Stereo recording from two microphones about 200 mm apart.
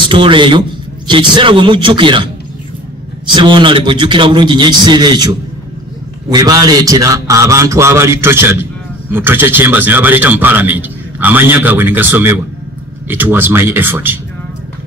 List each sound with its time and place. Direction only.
0.1 s a man's voice: 25° right (ahead or behind)
3.3 s a man's voice: 25° right (ahead or behind)
6.3 s a man's voice: 20° right (ahead or behind)